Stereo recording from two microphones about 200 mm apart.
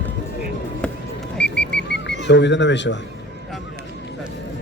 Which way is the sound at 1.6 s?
60° left (ahead or behind).